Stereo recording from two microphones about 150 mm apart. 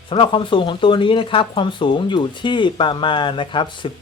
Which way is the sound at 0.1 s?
35° left (ahead or behind).